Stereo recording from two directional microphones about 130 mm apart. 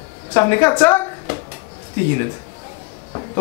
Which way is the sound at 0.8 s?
20° left (ahead or behind).